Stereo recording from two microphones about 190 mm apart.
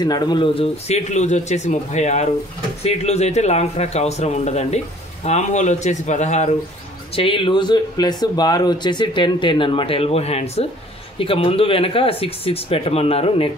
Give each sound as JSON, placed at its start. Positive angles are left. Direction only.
{"t": 0.0, "sound": "speech", "side_deg": 20}
{"t": 7.2, "sound": "speech", "side_deg": 25}